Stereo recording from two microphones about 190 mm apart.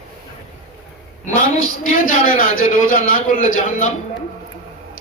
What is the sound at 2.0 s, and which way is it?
A man's voice, 45° left (ahead or behind).